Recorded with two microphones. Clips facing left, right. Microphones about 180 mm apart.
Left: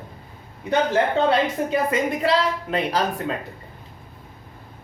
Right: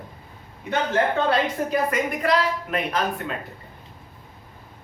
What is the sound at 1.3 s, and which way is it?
A woman's voice, 25° left (ahead or behind).